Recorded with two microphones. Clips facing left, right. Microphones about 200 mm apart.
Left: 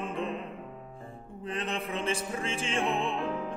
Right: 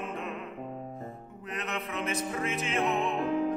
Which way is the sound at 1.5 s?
30° left (ahead or behind).